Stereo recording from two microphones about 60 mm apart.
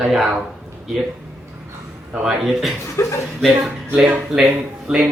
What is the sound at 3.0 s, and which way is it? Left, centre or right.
Speech, left.